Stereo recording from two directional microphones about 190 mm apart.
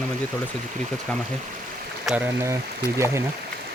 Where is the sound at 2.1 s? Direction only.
10° right (ahead or behind).